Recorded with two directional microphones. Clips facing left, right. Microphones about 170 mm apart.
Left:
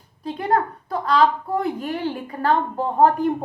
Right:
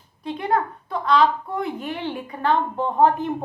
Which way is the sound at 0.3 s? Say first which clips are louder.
Left 1 dB; 35° left (ahead or behind).